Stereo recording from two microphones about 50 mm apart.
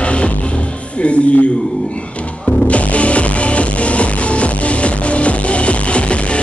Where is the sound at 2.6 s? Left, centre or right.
Left.